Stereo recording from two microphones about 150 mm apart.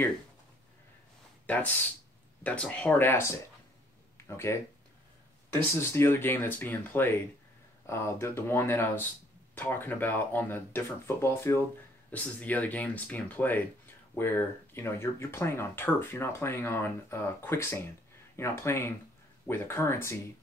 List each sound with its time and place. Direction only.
1.4 s speech: 10° left (ahead or behind)
4.5 s speech: 15° left (ahead or behind)